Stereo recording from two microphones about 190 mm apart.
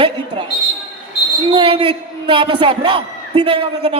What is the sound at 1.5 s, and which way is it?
A man's voice, 30° right (ahead or behind).